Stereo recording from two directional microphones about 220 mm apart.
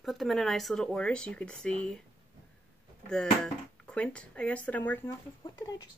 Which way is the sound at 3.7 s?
5° left (ahead or behind).